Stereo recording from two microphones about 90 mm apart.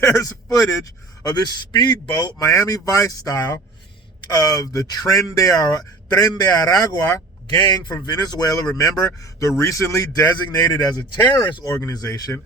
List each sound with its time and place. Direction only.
0.0 s a man's voice: 35° left (ahead or behind)
8.0 s a man's voice: 50° left (ahead or behind)
11.3 s speech: 60° left (ahead or behind)
11.9 s a man's voice: 40° left (ahead or behind)